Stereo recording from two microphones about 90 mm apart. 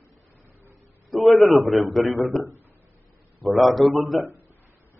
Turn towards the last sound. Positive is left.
turn(degrees=0)  # may be behind; listen again after turning